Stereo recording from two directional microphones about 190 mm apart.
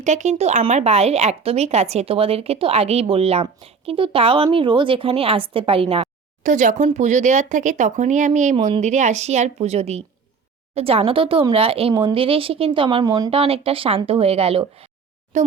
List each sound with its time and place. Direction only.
0.0 s a woman's voice: 40° right (ahead or behind)
6.4 s a woman's voice: 40° right (ahead or behind)